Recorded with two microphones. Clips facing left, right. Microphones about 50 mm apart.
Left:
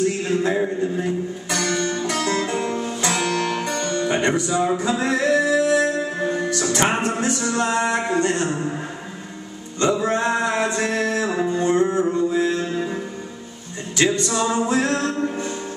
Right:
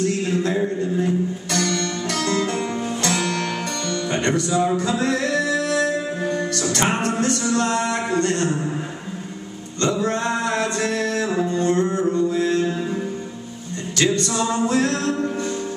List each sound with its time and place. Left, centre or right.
0.0 s music: centre
9.8 s music: centre